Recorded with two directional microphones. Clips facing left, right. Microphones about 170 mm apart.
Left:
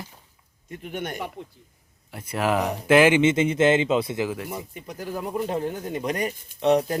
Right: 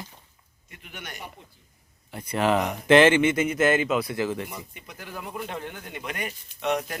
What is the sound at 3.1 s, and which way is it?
A man's voice, 20° left (ahead or behind).